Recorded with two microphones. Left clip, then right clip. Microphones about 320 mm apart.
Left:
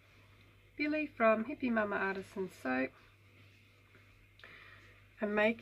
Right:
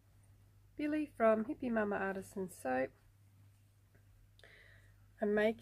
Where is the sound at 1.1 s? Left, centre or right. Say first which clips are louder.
Left 1 dB; right.